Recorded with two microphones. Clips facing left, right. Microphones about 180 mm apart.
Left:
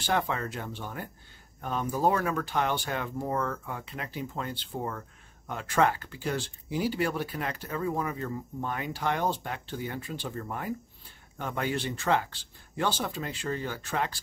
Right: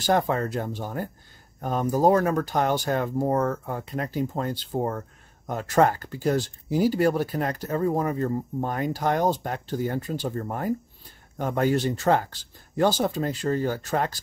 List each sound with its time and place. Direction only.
0.0 s speech: 40° right (ahead or behind)